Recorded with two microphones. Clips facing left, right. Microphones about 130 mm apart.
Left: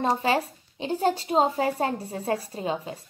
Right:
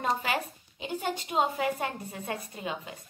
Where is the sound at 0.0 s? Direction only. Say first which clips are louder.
Left 6 dB; 30° left (ahead or behind).